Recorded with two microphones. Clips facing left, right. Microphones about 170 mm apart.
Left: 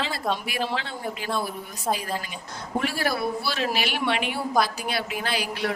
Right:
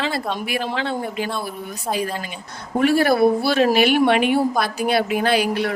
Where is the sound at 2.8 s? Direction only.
55° right (ahead or behind).